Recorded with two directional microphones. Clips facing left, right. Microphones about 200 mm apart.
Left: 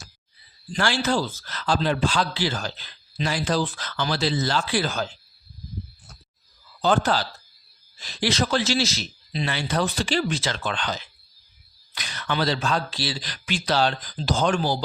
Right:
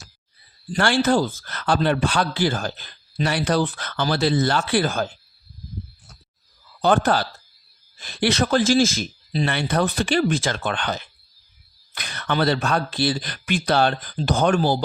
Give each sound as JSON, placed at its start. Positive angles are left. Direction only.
{"t": 0.7, "sound": "a man's voice", "side_deg": -55}
{"t": 6.8, "sound": "a man's voice", "side_deg": -55}